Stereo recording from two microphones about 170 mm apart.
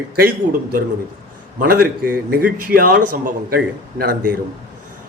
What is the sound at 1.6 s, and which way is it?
A man's voice, 60° right (ahead or behind).